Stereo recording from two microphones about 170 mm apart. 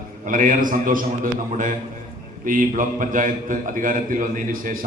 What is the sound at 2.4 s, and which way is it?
A man's voice, 50° right (ahead or behind).